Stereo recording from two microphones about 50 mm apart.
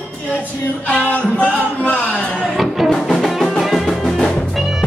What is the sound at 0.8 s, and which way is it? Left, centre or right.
Music, left.